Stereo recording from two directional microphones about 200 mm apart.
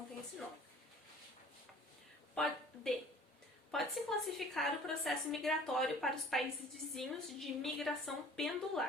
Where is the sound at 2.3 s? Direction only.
Centre (ahead or behind).